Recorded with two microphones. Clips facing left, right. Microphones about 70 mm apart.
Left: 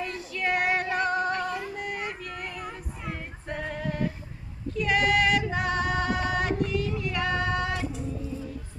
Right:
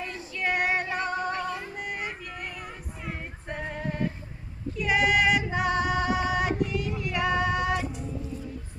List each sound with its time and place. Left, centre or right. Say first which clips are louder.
0.0 s female singing: left 1 dB; centre
1.8 s music: left 1 dB; centre
3.5 s music: left 1 dB; centre
4.8 s female singing: even; centre